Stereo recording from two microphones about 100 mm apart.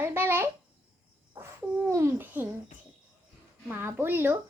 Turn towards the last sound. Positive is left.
turn(degrees=-20)  # may be behind; listen again after turning